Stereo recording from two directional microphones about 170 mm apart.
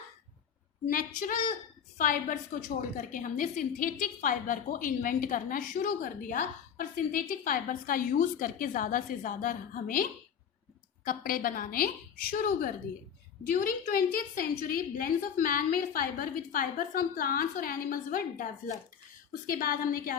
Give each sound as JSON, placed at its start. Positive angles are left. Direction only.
{"t": 0.9, "sound": "a woman's voice", "side_deg": 55}